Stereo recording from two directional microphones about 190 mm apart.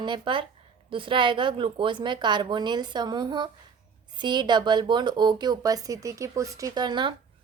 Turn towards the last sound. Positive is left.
turn(degrees=-25)  # may be behind; listen again after turning